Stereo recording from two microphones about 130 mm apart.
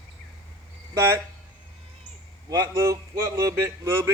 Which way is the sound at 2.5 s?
25° right (ahead or behind).